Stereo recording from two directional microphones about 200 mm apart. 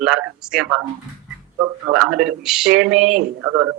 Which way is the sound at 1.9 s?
5° right (ahead or behind).